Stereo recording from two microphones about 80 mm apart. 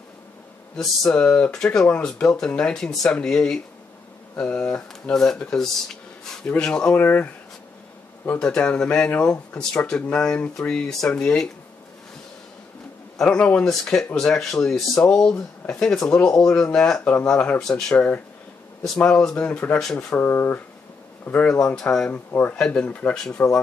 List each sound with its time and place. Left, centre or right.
0.7 s speech: centre
7.0 s speech: left
8.4 s speech: centre
13.2 s speech: centre
19.8 s speech: centre
20.2 s speech: left; by 22.1 s centre
22.1 s speech: left
23.1 s speech: centre